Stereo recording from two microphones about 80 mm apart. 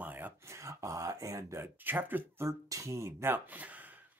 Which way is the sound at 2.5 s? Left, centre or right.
Right.